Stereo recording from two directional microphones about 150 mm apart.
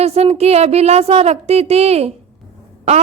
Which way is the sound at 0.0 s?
45° right (ahead or behind).